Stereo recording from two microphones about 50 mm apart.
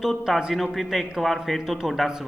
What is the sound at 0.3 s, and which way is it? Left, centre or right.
Speech, centre.